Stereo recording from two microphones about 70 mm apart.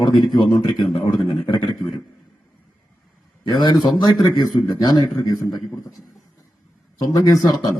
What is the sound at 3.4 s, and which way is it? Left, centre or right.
Speech, left.